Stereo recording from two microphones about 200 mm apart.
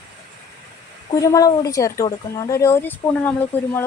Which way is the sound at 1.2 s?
15° left (ahead or behind).